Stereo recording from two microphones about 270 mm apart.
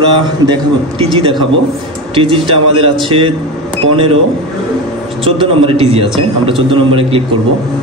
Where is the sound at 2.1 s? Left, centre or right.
Centre.